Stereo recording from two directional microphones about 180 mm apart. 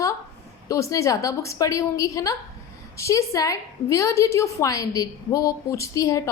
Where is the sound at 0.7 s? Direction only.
15° left (ahead or behind).